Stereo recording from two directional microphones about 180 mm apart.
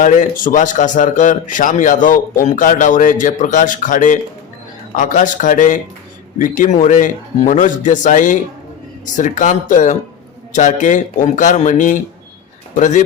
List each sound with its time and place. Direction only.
0.0 s a man's voice: 45° left (ahead or behind)